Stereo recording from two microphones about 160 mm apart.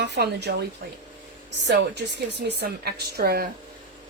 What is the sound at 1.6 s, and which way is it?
A woman's voice, 90° right.